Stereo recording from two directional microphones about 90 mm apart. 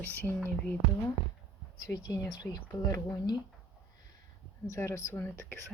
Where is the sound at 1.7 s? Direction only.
45° left (ahead or behind).